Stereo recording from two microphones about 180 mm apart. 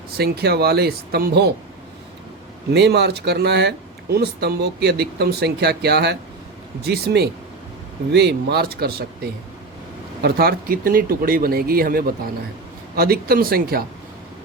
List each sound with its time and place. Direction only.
0.2 s speech: 60° right (ahead or behind)
2.7 s speech: 65° right (ahead or behind)
10.2 s speech: 60° right (ahead or behind)